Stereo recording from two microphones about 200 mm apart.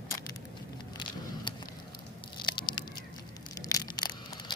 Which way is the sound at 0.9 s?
20° left (ahead or behind).